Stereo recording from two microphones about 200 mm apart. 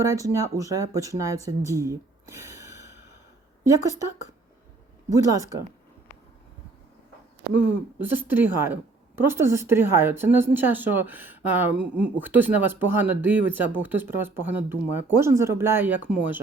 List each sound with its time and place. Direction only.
0.1 s a woman's voice: 15° right (ahead or behind)
1.5 s a sound: 15° right (ahead or behind)
5.0 s a woman's voice: 15° right (ahead or behind)
7.6 s a woman's voice: 10° right (ahead or behind)